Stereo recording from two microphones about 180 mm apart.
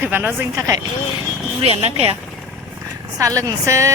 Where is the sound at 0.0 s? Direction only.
10° right (ahead or behind).